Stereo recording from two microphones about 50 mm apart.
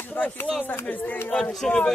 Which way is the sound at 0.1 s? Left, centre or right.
Left.